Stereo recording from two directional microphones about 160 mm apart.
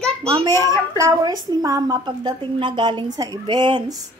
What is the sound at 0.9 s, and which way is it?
A woman's voice, 20° right (ahead or behind).